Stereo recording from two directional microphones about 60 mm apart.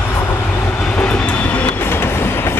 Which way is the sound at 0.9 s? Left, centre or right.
Left.